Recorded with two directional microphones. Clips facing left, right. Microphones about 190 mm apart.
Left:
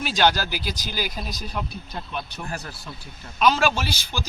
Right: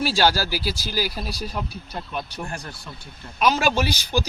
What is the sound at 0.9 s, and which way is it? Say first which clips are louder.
Speech: right 3 dB; 40° right (ahead or behind).